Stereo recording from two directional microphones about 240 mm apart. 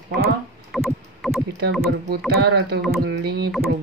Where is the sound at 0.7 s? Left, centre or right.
Centre.